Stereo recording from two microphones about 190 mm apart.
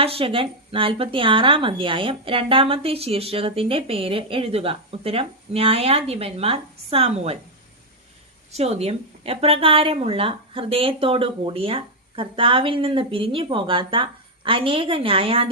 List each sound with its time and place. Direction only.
0.0 s speech: 30° right (ahead or behind)
8.5 s speech: 35° right (ahead or behind)